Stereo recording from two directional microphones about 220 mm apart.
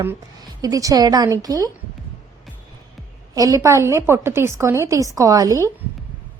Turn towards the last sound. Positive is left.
turn(degrees=-15)  # may be behind; listen again after turning